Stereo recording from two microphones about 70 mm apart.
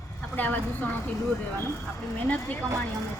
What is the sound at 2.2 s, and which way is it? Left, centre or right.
Speech, left.